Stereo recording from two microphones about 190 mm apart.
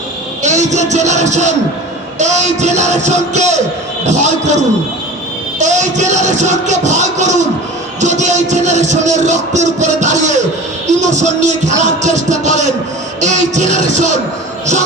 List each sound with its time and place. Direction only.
0.4 s music: 35° right (ahead or behind)